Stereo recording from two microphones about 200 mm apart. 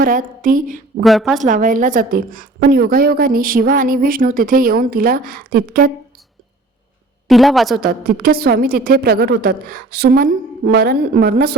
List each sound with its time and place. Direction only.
0.0 s a woman's voice: 45° right (ahead or behind)
1.0 s a woman's voice: centre (ahead or behind)
1.4 s a woman's voice: 40° right (ahead or behind)
7.3 s a woman's voice: centre (ahead or behind)
7.8 s a woman's voice: 50° right (ahead or behind)